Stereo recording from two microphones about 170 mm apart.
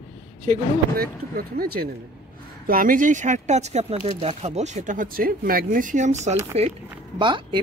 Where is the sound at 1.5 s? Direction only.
60° right (ahead or behind).